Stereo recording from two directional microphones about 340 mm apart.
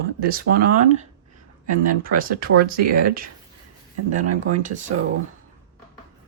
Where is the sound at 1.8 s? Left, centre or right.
Right.